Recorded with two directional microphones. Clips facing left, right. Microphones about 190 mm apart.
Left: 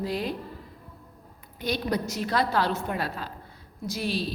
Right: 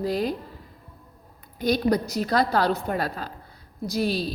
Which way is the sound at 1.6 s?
40° right (ahead or behind).